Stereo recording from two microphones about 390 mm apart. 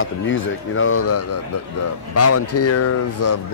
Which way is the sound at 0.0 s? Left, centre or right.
Left.